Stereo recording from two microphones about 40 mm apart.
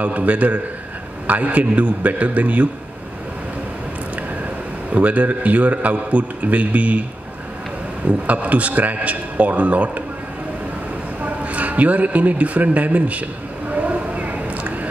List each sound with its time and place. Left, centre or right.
0.0 s a man's voice: right
4.9 s a man's voice: right
8.1 s a man's voice: right
11.2 s a man's voice: right
13.7 s a sound: right